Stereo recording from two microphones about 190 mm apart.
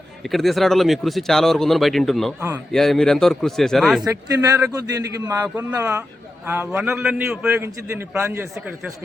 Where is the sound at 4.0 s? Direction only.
15° right (ahead or behind).